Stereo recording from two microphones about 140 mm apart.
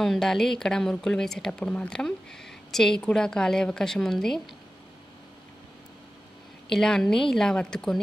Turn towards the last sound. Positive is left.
turn(degrees=5)  # may be behind; listen again after turning